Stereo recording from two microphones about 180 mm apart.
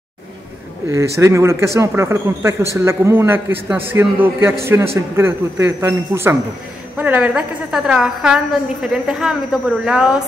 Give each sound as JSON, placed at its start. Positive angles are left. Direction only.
{"t": 0.8, "sound": "a man's voice", "side_deg": -15}